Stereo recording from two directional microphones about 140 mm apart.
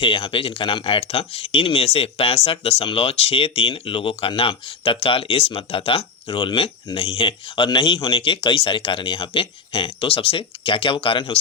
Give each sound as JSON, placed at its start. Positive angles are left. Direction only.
{"t": 0.0, "sound": "speech", "side_deg": 40}